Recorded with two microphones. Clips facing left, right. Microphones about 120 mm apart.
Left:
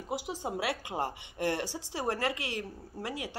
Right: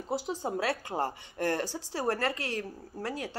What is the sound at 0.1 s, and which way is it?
Speech, 15° left (ahead or behind).